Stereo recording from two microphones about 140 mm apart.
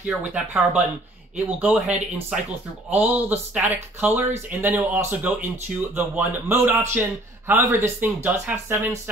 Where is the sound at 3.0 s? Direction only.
10° right (ahead or behind).